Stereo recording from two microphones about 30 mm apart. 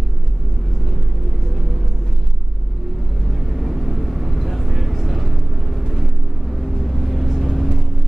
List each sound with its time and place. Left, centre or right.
3.3 s vehicle: centre